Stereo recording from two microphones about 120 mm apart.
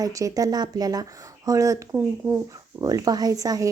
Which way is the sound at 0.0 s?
30° right (ahead or behind).